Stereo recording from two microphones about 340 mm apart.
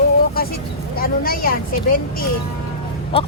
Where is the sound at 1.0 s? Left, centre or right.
Left.